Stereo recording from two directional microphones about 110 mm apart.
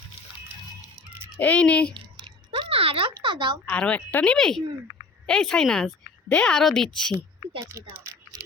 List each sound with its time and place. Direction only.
1.4 s a woman's voice: 10° left (ahead or behind)
2.6 s a sound: 60° right (ahead or behind)
3.7 s a woman's voice: 10° left (ahead or behind)
7.6 s speech: 25° right (ahead or behind)